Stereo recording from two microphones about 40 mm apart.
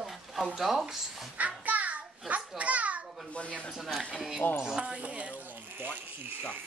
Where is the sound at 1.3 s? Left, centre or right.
Right.